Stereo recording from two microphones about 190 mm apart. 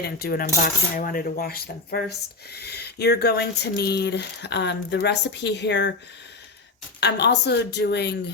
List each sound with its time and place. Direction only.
0.0 s cutlery: 55° left (ahead or behind)
7.0 s cutlery: 60° left (ahead or behind)